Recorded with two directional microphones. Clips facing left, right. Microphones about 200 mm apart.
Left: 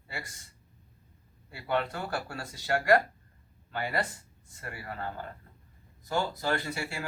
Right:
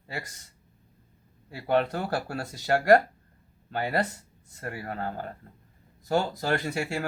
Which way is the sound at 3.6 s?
40° right (ahead or behind).